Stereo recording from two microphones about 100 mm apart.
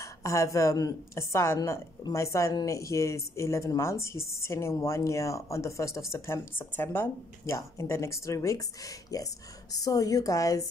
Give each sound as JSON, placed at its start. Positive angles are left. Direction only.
{"t": 0.0, "sound": "speech", "side_deg": 30}